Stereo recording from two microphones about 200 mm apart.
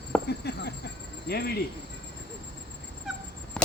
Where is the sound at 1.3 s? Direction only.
55° left (ahead or behind).